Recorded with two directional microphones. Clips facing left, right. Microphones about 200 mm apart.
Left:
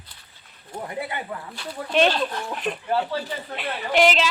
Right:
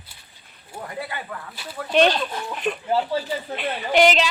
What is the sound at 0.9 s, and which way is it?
Speech, 20° left (ahead or behind).